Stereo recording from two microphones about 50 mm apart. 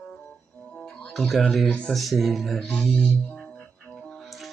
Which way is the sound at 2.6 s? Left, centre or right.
Left.